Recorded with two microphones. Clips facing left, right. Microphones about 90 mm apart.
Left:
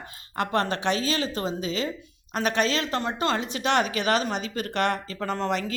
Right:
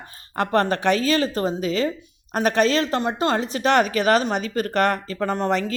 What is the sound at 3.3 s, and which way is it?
Speech, 40° right (ahead or behind).